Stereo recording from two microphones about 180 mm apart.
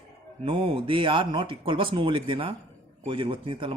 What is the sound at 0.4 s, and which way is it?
Speech, 30° right (ahead or behind).